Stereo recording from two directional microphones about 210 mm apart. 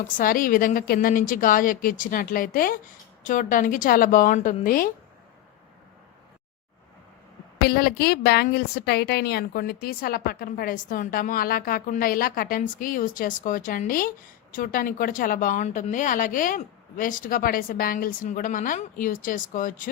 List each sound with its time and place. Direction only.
0.2 s speech: 40° left (ahead or behind)
7.6 s a woman's voice: 45° left (ahead or behind)